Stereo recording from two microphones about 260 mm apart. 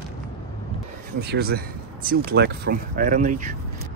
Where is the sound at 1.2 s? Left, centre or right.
Right.